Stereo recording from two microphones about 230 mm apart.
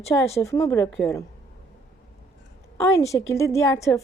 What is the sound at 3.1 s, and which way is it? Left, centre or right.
Speech, centre.